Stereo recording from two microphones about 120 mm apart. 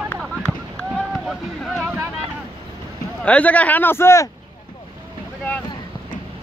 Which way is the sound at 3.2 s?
10° left (ahead or behind).